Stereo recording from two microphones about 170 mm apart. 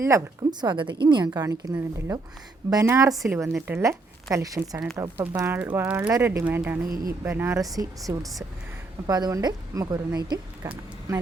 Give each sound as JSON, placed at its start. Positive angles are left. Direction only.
{"t": 0.1, "sound": "a woman's voice", "side_deg": -20}
{"t": 6.8, "sound": "speech", "side_deg": -55}
{"t": 7.3, "sound": "a woman's voice", "side_deg": -15}